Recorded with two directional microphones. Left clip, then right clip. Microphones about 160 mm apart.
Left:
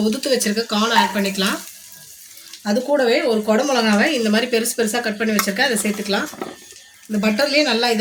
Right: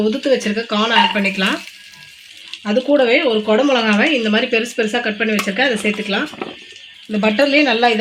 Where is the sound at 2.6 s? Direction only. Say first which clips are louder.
Right 3 dB; 45° right (ahead or behind).